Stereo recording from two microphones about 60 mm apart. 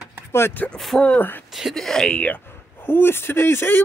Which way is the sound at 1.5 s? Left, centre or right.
Centre.